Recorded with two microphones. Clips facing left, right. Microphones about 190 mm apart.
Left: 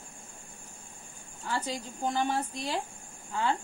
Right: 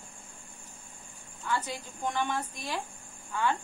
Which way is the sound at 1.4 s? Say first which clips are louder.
Even; 35° left (ahead or behind).